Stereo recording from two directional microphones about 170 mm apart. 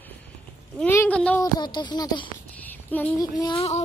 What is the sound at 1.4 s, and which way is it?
Speech, 25° left (ahead or behind).